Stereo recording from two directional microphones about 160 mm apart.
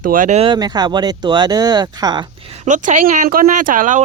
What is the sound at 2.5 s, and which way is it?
Speech, 45° right (ahead or behind).